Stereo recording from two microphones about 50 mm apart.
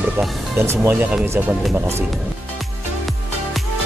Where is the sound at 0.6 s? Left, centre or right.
Right.